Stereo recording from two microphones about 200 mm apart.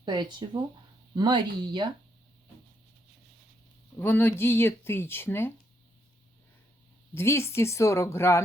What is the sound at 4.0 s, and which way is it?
A woman's voice, 10° left (ahead or behind).